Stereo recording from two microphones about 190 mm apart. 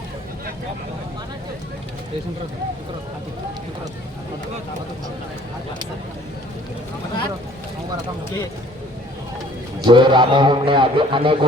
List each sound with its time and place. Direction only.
9.8 s a man's voice: 25° right (ahead or behind)